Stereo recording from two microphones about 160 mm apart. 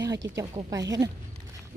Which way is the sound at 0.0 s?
20° right (ahead or behind).